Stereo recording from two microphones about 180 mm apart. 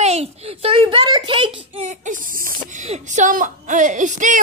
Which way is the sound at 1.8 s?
45° right (ahead or behind).